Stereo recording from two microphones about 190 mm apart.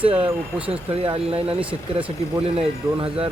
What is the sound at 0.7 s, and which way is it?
Speech, 30° right (ahead or behind).